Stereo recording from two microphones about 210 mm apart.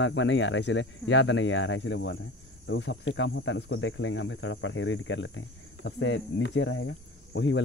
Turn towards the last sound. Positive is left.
turn(degrees=65)  # may be behind; listen again after turning